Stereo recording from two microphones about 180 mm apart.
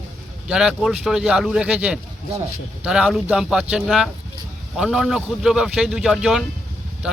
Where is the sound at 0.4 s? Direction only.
5° right (ahead or behind).